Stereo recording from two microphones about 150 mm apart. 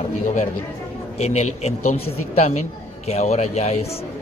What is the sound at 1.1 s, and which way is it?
Speech, 45° left (ahead or behind).